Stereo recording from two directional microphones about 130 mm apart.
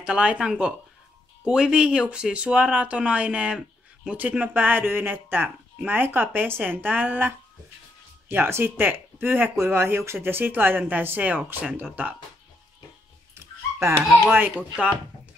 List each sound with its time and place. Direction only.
0.0 s speech: 10° right (ahead or behind)
13.3 s dog: 20° right (ahead or behind)
14.3 s speech: 15° right (ahead or behind)